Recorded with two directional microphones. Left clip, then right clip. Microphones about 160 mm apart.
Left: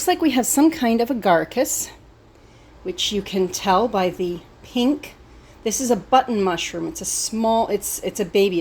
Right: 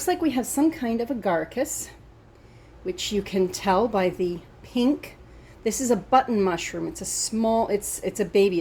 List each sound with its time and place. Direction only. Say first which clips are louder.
0.2 s a woman's voice: left 6 dB; 40° left (ahead or behind)
2.8 s a woman's voice: left 4 dB; 10° left (ahead or behind)